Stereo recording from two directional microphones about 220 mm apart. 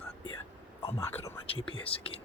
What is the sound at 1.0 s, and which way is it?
Speech, 10° left (ahead or behind).